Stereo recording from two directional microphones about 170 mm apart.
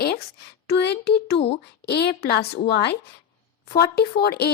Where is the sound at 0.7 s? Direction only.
80° left.